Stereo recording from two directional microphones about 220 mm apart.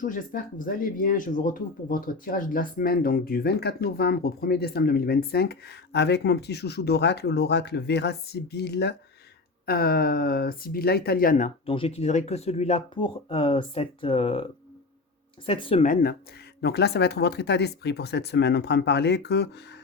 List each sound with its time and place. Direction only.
0.0 s speech: 40° left (ahead or behind)
15.4 s speech: 25° left (ahead or behind)
16.6 s speech: 50° left (ahead or behind)